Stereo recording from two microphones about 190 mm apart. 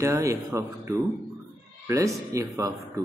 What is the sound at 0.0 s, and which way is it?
Speech, 15° right (ahead or behind).